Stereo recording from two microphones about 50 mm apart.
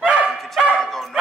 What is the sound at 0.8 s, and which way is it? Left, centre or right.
Speech, centre.